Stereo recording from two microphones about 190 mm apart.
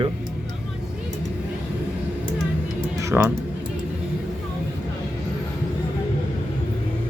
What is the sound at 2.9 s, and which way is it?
Music, 15° right (ahead or behind).